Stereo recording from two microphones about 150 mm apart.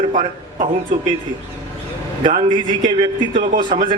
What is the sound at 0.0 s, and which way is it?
Speech, 60° right (ahead or behind).